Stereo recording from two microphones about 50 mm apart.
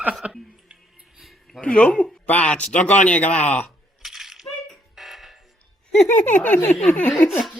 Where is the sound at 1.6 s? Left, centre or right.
Left.